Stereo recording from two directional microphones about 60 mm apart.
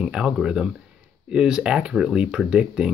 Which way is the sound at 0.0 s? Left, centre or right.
Centre.